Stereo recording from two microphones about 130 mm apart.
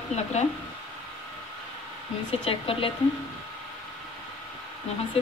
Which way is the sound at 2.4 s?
45° left (ahead or behind).